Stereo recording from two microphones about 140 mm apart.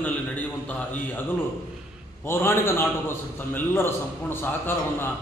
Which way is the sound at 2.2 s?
15° left (ahead or behind).